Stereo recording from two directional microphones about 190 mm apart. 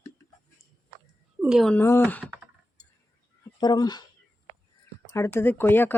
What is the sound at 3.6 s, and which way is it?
Speech, 20° left (ahead or behind).